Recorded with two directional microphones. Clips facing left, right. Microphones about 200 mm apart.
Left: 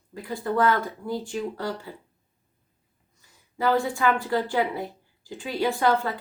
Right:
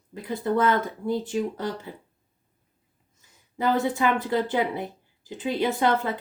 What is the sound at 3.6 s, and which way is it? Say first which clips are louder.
Speech: even; 20° right (ahead or behind).